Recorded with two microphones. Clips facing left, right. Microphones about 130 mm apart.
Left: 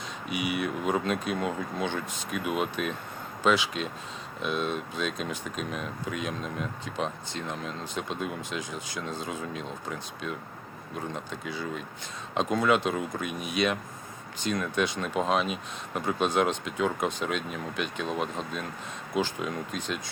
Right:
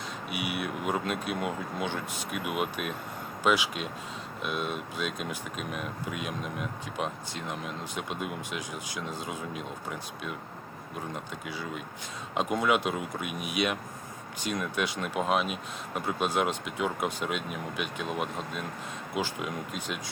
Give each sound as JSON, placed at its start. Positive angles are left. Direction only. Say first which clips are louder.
{"t": 0.3, "sound": "speech", "louder": "left 4 dB", "side_deg": -5}